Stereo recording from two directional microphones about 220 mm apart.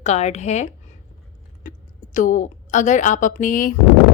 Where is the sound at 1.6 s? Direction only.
35° left (ahead or behind).